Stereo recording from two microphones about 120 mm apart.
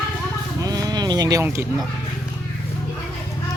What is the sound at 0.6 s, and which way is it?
Sheep, 30° right (ahead or behind).